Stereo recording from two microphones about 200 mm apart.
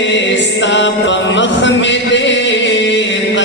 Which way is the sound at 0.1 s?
65° left (ahead or behind).